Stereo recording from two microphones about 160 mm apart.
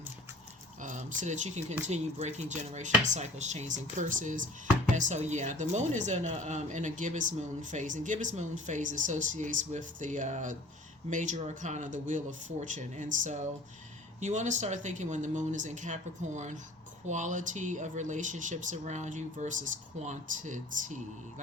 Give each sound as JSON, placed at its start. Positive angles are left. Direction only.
{"t": 0.8, "sound": "speech", "side_deg": -50}